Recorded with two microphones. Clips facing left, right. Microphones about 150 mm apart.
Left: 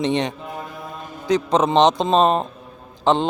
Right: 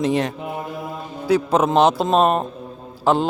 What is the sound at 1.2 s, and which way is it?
Speech, 5° right (ahead or behind).